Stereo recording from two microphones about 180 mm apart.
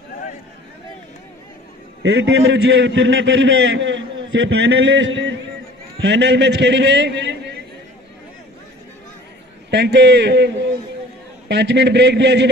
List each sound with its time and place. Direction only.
2.0 s a man's voice: 75° right (ahead or behind)
9.7 s a man's voice: 75° right (ahead or behind)